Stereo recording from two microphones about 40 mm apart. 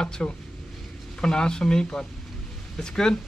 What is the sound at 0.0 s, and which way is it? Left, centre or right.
A man's voice, left.